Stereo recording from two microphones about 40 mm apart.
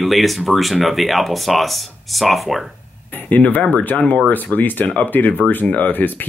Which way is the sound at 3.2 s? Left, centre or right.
Left.